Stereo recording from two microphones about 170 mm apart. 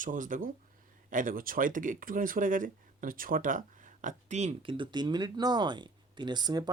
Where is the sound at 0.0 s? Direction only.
50° right (ahead or behind).